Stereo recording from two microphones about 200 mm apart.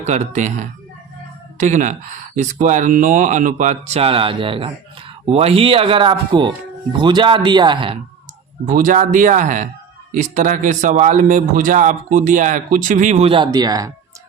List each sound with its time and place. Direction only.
0.0 s a man's voice: 35° right (ahead or behind)
8.6 s a man's voice: 40° right (ahead or behind); by 13.9 s 20° right (ahead or behind)